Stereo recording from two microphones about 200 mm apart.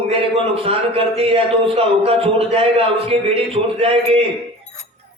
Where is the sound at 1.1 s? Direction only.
30° right (ahead or behind).